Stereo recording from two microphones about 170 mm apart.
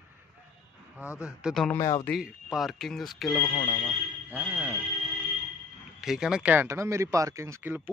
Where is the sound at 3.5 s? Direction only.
35° left (ahead or behind).